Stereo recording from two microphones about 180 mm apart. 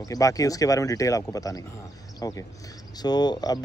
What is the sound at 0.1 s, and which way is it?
Speech, 20° left (ahead or behind).